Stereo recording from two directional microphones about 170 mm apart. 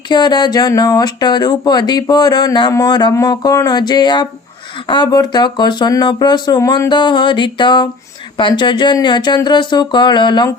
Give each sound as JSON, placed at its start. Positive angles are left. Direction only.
{"t": 0.1, "sound": "speech", "side_deg": 25}